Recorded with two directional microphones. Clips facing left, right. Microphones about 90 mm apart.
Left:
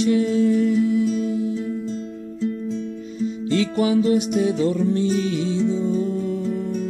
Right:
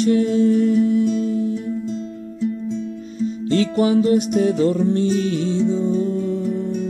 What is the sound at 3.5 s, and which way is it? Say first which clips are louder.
Music: right 3 dB; 45° right (ahead or behind).